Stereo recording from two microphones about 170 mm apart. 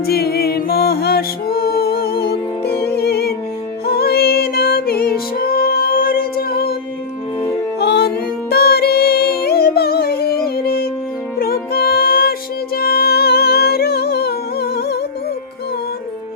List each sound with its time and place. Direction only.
0.0 s music: 65° left (ahead or behind)
7.8 s music: 75° left (ahead or behind)